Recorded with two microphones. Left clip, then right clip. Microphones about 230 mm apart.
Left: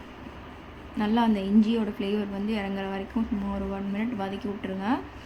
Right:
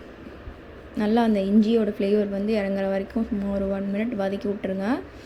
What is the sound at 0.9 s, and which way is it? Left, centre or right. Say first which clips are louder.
A woman's voice: right 4 dB; centre.